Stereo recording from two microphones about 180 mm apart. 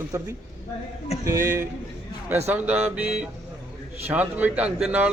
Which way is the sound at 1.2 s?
15° right (ahead or behind).